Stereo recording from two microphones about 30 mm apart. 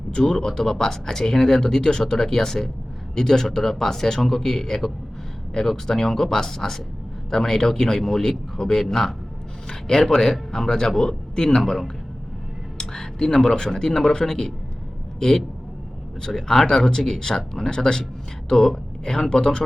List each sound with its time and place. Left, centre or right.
0.1 s speech: left
9.6 s speech: left
12.8 s speech: centre
16.2 s speech: centre
18.4 s speech: centre